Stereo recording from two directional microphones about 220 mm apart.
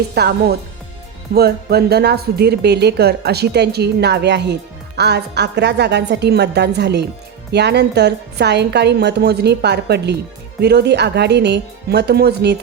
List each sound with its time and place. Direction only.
0.1 s speech: 45° right (ahead or behind)